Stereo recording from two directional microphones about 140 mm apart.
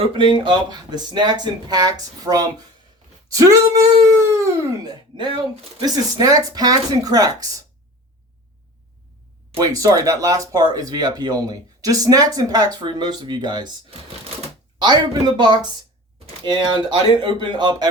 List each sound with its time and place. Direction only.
0.0 s speech: 35° right (ahead or behind)
9.6 s speech: 25° right (ahead or behind)
14.8 s speech: 30° right (ahead or behind)